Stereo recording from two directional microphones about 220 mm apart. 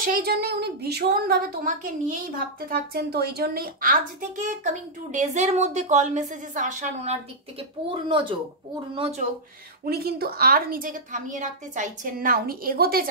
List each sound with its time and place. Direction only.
0.0 s a woman's voice: 40° right (ahead or behind)
9.8 s a woman's voice: 45° right (ahead or behind)